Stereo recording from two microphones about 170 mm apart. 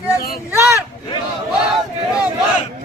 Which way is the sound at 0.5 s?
15° right (ahead or behind).